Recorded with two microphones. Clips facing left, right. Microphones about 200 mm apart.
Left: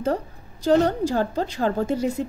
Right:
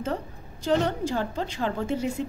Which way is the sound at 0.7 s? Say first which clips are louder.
Left 5 dB; 40° left (ahead or behind).